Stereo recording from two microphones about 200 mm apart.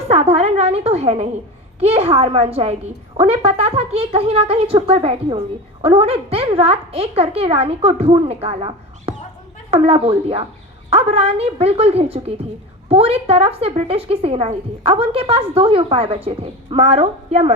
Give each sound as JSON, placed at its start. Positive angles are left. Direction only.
{"t": 0.1, "sound": "a woman's voice", "side_deg": -30}